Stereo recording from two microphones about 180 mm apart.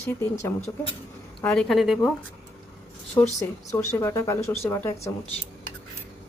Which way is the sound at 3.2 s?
15° left (ahead or behind).